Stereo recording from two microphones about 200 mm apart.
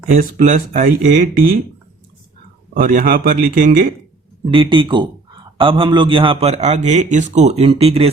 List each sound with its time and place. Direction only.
0.1 s speech: 40° right (ahead or behind)
2.8 s speech: 45° right (ahead or behind)
4.5 s a man's voice: 25° right (ahead or behind)